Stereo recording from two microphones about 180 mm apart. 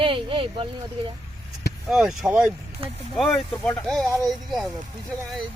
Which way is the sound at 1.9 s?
5° right (ahead or behind).